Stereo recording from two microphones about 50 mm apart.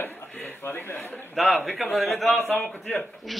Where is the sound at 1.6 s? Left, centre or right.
Centre.